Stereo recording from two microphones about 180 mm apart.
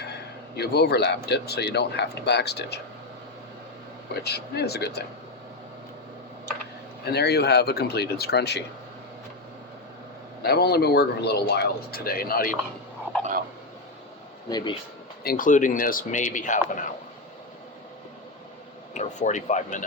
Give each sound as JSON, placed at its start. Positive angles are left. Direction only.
{"t": 0.0, "sound": "speech", "side_deg": 65}
{"t": 4.1, "sound": "speech", "side_deg": 65}
{"t": 7.0, "sound": "speech", "side_deg": 65}
{"t": 10.4, "sound": "speech", "side_deg": 60}
{"t": 14.5, "sound": "speech", "side_deg": 25}
{"t": 15.2, "sound": "speech", "side_deg": 55}
{"t": 18.9, "sound": "speech", "side_deg": 40}